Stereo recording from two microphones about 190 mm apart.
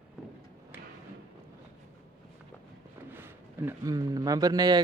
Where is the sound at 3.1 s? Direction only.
10° right (ahead or behind).